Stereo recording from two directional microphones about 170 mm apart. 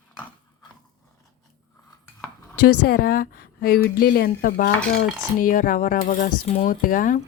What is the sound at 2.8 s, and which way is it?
A woman's voice, 65° left (ahead or behind).